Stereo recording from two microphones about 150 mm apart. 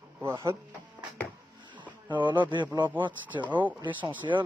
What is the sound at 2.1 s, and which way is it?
Speech, 30° right (ahead or behind).